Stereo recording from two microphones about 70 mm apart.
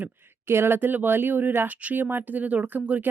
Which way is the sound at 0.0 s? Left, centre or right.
Right.